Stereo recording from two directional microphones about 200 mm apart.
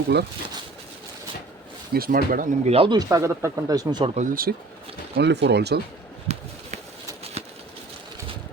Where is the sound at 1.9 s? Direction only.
45° right (ahead or behind).